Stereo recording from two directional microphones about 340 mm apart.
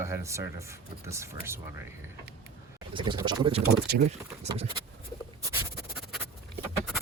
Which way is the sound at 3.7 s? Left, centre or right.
Right.